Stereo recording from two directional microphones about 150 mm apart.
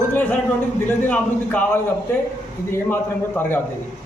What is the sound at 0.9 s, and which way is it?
A man's voice, 10° left (ahead or behind).